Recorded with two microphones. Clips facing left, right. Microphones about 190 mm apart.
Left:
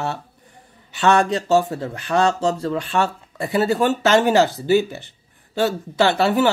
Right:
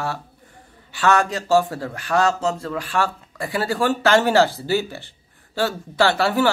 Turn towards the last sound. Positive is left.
turn(degrees=20)  # may be behind; listen again after turning